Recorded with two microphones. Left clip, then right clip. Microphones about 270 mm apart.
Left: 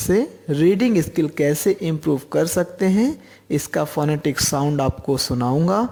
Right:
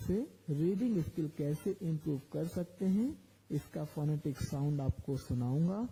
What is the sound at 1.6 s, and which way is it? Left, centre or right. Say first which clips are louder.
Speech: left 18 dB; centre.